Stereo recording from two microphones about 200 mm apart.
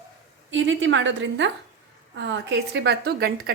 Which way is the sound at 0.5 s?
70° right (ahead or behind).